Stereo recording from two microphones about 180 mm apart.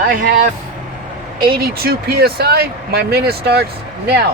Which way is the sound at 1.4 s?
55° right (ahead or behind).